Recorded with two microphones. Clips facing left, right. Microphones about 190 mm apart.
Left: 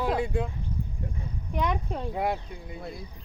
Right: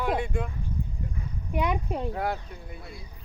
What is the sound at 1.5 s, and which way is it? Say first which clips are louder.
Speech: right 1 dB; 10° right (ahead or behind).